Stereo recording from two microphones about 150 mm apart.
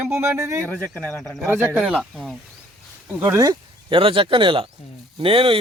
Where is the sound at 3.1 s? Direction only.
15° right (ahead or behind).